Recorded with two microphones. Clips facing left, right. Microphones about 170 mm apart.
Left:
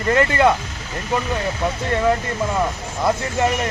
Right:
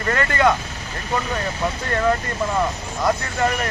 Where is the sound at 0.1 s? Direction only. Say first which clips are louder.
Left 3 dB; 25° left (ahead or behind).